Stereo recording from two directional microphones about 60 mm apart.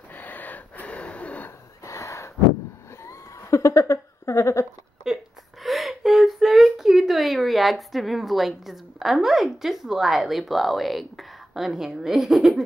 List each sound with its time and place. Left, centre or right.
0.1 s gasp: left
1.9 s a sound: left
5.0 s speech: centre